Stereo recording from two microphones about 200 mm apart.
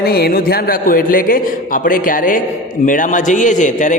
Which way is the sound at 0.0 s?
50° left (ahead or behind).